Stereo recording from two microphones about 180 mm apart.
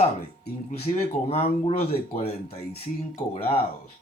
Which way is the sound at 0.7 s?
35° left (ahead or behind).